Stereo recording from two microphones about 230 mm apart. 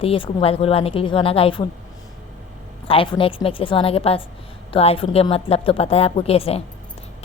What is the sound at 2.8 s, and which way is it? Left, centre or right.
Speech, left.